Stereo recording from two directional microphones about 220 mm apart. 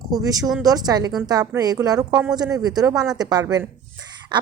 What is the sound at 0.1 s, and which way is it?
Speech, 15° right (ahead or behind).